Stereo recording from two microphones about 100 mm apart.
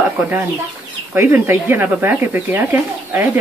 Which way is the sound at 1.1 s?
20° right (ahead or behind).